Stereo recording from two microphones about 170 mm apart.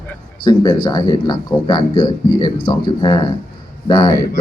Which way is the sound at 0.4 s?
25° left (ahead or behind).